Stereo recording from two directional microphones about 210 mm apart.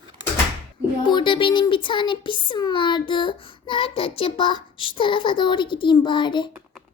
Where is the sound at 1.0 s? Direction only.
20° left (ahead or behind).